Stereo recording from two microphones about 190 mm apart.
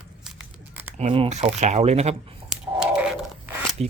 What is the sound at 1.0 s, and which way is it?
Speech, 35° right (ahead or behind).